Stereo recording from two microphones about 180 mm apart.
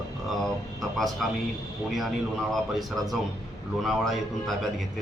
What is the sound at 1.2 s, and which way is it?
Speech, centre (ahead or behind).